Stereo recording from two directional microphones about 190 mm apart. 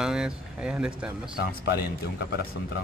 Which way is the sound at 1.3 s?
55° left (ahead or behind).